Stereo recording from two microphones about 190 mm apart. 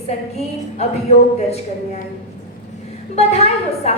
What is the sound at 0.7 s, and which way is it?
Speech, 35° left (ahead or behind).